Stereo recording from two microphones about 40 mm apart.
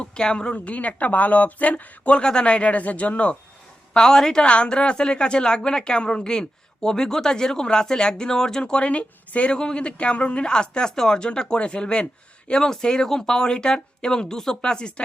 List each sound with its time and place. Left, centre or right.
0.0 s speech: left
0.5 s speech: left
2.2 s speech: left
3.9 s speech: centre
4.4 s a woman's voice: left